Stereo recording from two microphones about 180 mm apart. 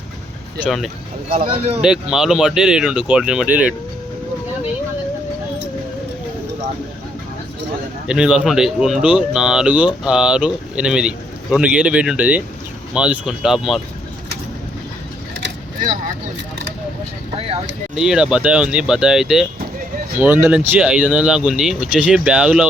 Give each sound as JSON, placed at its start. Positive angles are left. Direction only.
{"t": 0.6, "sound": "speech", "side_deg": 0}
{"t": 1.5, "sound": "speech", "side_deg": -35}
{"t": 1.8, "sound": "speech", "side_deg": -5}
{"t": 8.0, "sound": "speech", "side_deg": -5}
{"t": 17.9, "sound": "speech", "side_deg": -5}